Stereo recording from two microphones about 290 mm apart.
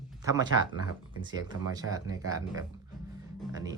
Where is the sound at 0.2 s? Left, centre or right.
Centre.